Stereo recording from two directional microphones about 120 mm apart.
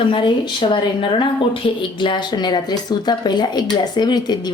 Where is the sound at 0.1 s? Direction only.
45° left (ahead or behind).